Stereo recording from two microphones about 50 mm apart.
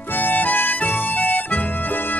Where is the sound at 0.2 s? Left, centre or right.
Left.